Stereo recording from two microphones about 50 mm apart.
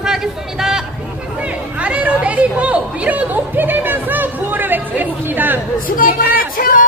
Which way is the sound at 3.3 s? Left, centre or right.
Right.